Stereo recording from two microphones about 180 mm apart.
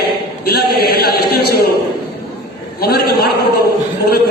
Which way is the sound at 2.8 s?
60° left (ahead or behind).